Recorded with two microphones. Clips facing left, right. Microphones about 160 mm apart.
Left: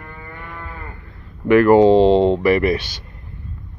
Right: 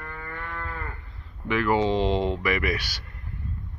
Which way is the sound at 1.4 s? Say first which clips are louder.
Left 12 dB; 50° left (ahead or behind).